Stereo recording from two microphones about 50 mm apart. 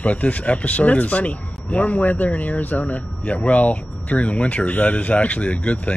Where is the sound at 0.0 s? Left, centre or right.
Left.